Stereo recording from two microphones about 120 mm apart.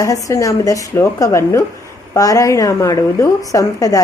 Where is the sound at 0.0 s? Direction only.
30° left (ahead or behind).